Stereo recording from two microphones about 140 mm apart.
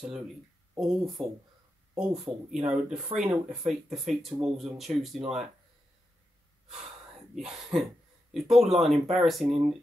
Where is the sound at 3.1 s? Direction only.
40° right (ahead or behind).